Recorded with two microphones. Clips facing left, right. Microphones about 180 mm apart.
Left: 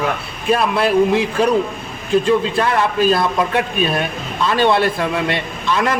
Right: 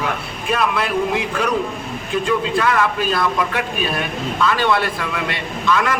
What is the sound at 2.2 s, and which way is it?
A man's voice, 30° left (ahead or behind).